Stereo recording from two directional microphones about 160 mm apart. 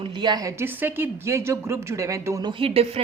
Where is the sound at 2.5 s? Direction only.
35° right (ahead or behind).